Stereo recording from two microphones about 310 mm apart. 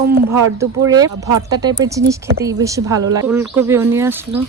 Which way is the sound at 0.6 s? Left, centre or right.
Centre.